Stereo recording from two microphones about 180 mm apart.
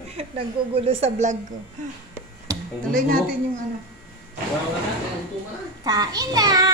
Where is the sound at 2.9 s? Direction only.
50° right (ahead or behind).